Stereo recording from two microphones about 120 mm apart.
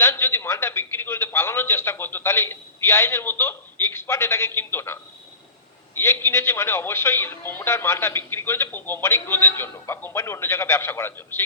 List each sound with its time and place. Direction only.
0.0 s a man's voice: 20° left (ahead or behind)
6.0 s a man's voice: 20° left (ahead or behind)